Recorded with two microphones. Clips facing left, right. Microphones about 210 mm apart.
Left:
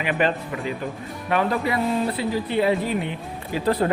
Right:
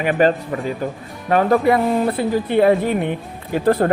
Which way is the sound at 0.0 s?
45° right (ahead or behind).